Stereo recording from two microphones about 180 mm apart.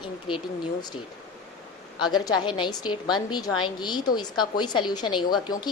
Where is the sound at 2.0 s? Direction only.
25° left (ahead or behind).